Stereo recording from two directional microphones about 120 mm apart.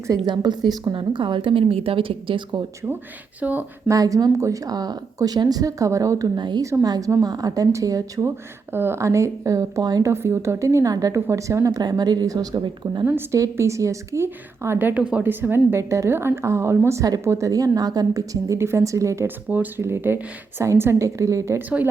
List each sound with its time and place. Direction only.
0.3 s a woman's voice: 35° right (ahead or behind)
3.4 s speech: 15° right (ahead or behind)
3.8 s a woman's voice: 30° right (ahead or behind)
13.1 s a woman's voice: 20° right (ahead or behind)